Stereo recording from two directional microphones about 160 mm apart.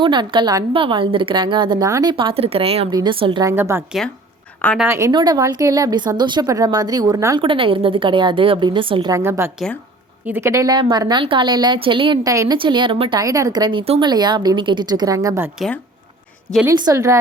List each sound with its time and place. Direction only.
0.0 s a woman's voice: 30° right (ahead or behind)
3.4 s a woman's voice: 15° right (ahead or behind)
4.9 s speech: 20° right (ahead or behind)
7.4 s a woman's voice: 35° right (ahead or behind)
9.1 s a woman's voice: 15° right (ahead or behind)
12.3 s speech: 20° right (ahead or behind)
12.5 s speech: 30° right (ahead or behind)
15.5 s speech: centre (ahead or behind)
16.6 s speech: 20° right (ahead or behind)